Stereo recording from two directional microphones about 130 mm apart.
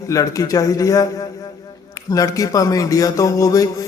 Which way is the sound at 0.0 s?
25° left (ahead or behind).